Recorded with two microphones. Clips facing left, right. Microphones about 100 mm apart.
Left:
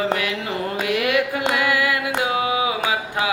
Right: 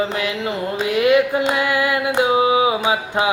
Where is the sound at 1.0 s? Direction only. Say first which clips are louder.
Right 9 dB; 25° right (ahead or behind).